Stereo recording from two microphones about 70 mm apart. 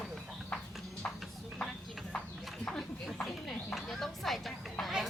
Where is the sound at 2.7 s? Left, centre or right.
Centre.